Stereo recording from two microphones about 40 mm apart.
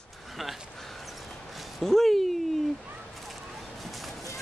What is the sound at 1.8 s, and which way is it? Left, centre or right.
Speech, centre.